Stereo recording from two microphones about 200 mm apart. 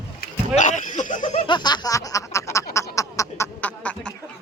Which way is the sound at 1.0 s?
40° left (ahead or behind).